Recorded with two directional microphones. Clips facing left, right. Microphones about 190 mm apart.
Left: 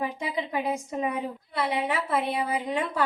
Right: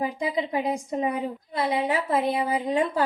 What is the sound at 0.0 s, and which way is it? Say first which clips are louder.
A woman's voice: right 4 dB; 35° right (ahead or behind).